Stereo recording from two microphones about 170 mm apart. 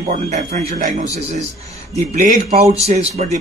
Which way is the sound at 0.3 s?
50° right (ahead or behind).